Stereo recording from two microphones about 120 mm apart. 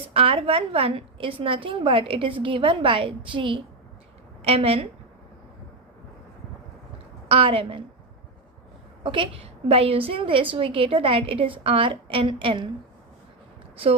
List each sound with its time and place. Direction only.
0.1 s a woman's voice: 50° right (ahead or behind)
7.3 s a woman's voice: 50° right (ahead or behind)
9.0 s a woman's voice: 45° right (ahead or behind)